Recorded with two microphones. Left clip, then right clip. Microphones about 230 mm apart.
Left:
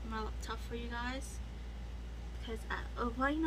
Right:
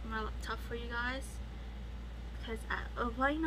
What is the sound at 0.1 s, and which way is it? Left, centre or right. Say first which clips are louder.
Vehicle: right 3 dB; centre.